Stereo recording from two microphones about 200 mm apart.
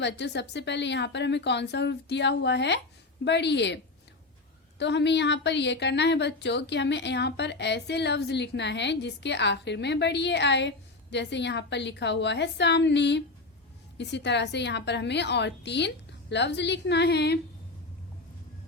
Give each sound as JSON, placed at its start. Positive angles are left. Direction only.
{"t": 0.0, "sound": "speech", "side_deg": 60}
{"t": 4.8, "sound": "speech", "side_deg": 60}